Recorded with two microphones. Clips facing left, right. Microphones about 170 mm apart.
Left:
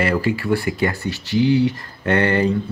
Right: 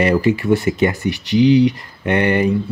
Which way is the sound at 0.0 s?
20° right (ahead or behind).